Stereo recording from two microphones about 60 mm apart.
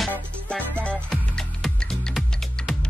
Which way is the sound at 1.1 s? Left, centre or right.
Centre.